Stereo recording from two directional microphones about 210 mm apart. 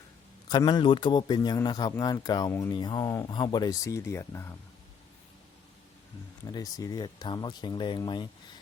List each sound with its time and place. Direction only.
0.4 s a man's voice: 20° left (ahead or behind)
6.4 s a man's voice: 15° left (ahead or behind)